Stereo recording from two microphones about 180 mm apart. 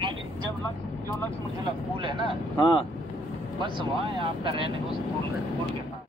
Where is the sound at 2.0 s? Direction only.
30° right (ahead or behind).